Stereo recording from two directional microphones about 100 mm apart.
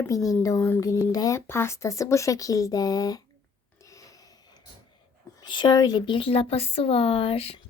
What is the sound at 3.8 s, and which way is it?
Filing, 35° left (ahead or behind).